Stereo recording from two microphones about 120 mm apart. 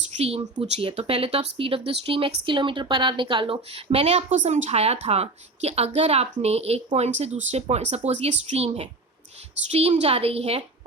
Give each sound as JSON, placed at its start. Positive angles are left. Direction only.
{"t": 0.2, "sound": "speech", "side_deg": -60}